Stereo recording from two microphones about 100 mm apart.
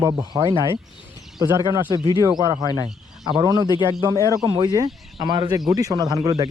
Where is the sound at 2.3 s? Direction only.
40° right (ahead or behind).